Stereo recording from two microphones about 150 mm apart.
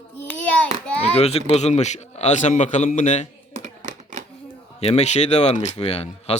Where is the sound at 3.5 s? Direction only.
55° right (ahead or behind).